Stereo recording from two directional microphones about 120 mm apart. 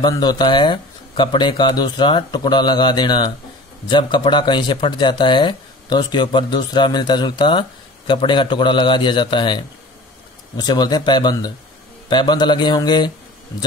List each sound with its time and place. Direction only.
0.0 s speech: 35° left (ahead or behind)